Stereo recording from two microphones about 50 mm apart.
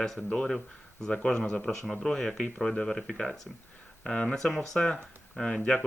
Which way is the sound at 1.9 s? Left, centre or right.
Centre.